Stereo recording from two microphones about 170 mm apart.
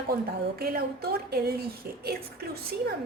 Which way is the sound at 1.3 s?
65° right (ahead or behind).